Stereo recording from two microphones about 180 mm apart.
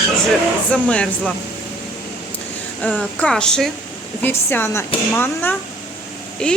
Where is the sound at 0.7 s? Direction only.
5° left (ahead or behind).